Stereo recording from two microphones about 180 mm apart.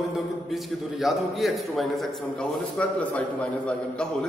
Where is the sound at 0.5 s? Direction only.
Centre (ahead or behind).